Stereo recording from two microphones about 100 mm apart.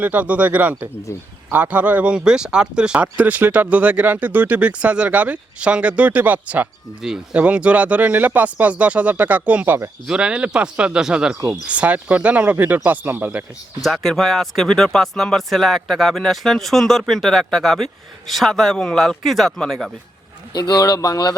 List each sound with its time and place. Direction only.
0.0 s speech: 15° right (ahead or behind)
10.1 s speech: 10° right (ahead or behind)
13.8 s speech: centre (ahead or behind)
20.5 s speech: 45° left (ahead or behind)